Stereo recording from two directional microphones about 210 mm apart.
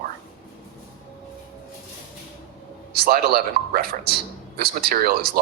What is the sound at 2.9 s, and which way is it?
Speech, 45° right (ahead or behind).